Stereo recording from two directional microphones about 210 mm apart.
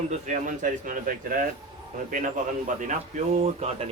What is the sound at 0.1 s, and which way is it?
Speech, 35° right (ahead or behind).